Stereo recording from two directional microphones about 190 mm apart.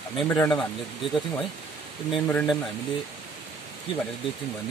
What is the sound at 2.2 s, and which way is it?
Speech, 5° left (ahead or behind).